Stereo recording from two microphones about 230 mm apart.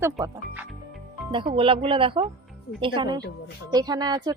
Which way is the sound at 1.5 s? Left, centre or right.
Right.